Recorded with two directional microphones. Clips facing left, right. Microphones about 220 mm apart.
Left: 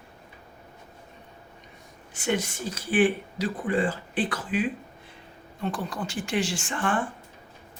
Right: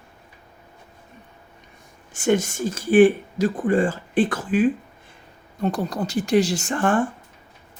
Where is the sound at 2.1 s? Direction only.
45° right (ahead or behind).